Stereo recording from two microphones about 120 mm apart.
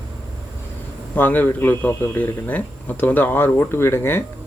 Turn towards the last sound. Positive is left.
turn(degrees=20)  # may be behind; listen again after turning